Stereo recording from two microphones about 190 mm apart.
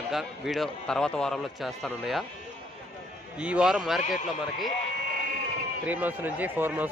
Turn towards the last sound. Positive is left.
turn(degrees=-10)  # may be behind; listen again after turning